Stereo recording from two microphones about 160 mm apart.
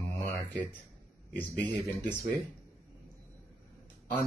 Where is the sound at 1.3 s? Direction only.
10° left (ahead or behind).